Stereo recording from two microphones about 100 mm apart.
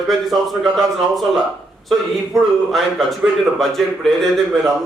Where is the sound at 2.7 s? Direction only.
Centre (ahead or behind).